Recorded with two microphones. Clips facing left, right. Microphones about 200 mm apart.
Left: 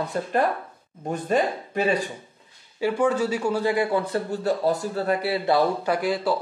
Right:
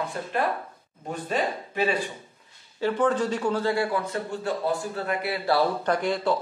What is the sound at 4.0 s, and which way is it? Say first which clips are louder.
Speech: left 4 dB; 35° left (ahead or behind).